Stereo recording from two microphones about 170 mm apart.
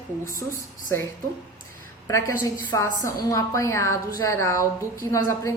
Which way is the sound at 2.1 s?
15° left (ahead or behind).